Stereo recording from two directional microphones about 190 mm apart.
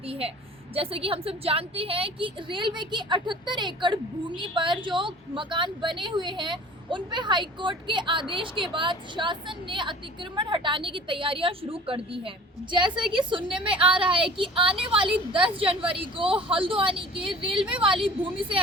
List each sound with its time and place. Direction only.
0.8 s a woman's voice: 30° right (ahead or behind)
13.7 s a woman's voice: 25° right (ahead or behind)